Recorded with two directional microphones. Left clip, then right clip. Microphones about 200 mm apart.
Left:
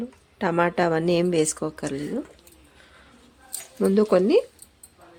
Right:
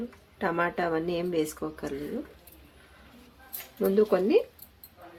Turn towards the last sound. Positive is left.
turn(degrees=55)  # may be behind; listen again after turning